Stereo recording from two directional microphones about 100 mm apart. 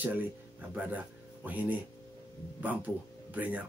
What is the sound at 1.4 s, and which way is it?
Speech, 15° right (ahead or behind).